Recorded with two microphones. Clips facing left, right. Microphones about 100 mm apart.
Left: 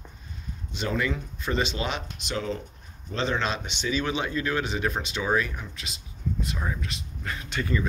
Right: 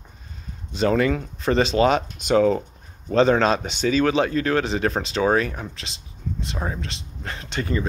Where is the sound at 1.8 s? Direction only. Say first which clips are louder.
Right 12 dB; 50° right (ahead or behind).